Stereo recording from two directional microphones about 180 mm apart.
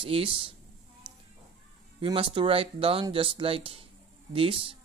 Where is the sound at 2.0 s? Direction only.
30° right (ahead or behind).